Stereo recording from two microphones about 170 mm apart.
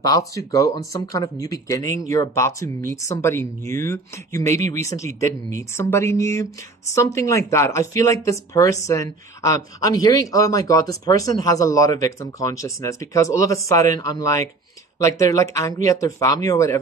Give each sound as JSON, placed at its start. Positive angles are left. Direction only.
{"t": 0.3, "sound": "speech", "side_deg": 20}